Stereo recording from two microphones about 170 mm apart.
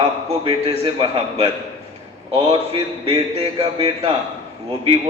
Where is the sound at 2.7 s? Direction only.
35° right (ahead or behind).